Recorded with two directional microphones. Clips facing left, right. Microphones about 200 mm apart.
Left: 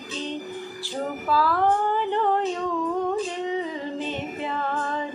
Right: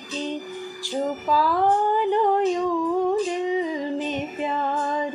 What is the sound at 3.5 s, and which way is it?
Music, 10° right (ahead or behind).